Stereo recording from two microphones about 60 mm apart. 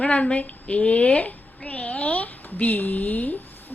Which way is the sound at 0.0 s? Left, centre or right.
Centre.